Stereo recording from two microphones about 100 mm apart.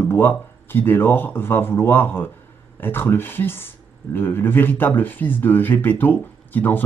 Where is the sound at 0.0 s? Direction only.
20° left (ahead or behind).